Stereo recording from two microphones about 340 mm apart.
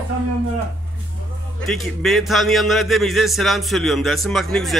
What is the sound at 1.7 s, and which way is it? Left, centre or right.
Speech, centre.